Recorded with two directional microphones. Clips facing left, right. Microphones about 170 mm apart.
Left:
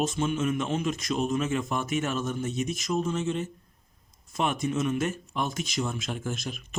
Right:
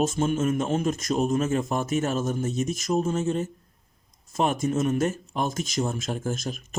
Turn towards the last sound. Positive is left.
turn(degrees=-45)  # may be behind; listen again after turning